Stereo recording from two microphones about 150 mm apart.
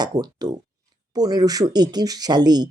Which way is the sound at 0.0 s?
25° right (ahead or behind).